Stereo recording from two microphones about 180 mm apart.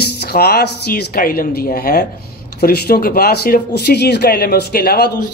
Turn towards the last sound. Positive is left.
turn(degrees=60)  # may be behind; listen again after turning